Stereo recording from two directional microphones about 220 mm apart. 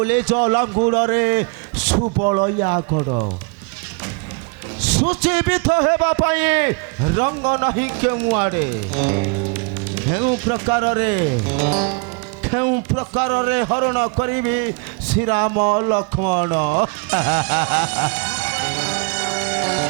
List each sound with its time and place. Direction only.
0.0 s speech: 25° right (ahead or behind)
1.9 s speech: 30° right (ahead or behind)
5.2 s a man's voice: 15° right (ahead or behind)
15.3 s speech: 20° right (ahead or behind)
18.5 s music: 15° right (ahead or behind)